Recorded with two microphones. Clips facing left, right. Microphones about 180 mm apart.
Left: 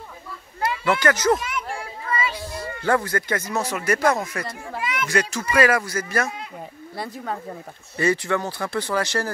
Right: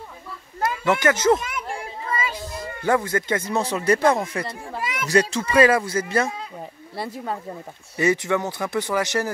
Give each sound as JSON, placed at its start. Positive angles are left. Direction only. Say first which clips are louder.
{"t": 0.8, "sound": "speech", "louder": "right 1 dB", "side_deg": -20}
{"t": 2.0, "sound": "children playing", "louder": "left 1 dB", "side_deg": -45}
{"t": 2.8, "sound": "speech", "louder": "right 1 dB", "side_deg": -20}
{"t": 4.8, "sound": "speech", "louder": "right 3 dB", "side_deg": -40}
{"t": 8.0, "sound": "speech", "louder": "right 1 dB", "side_deg": -20}